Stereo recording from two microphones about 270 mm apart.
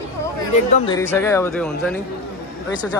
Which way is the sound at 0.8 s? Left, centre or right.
Centre.